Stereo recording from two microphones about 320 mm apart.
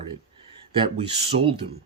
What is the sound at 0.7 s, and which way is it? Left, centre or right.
Speech, centre.